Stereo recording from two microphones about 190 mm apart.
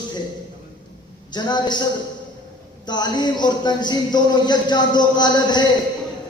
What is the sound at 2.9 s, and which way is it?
Speech, 20° left (ahead or behind).